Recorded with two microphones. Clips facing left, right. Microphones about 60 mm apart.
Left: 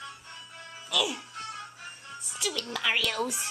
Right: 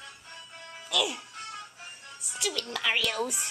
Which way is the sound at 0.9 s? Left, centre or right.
Centre.